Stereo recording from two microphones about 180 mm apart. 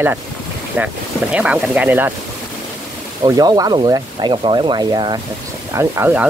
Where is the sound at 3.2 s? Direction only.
20° right (ahead or behind).